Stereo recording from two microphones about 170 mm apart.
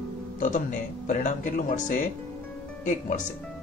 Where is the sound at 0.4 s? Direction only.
50° left (ahead or behind).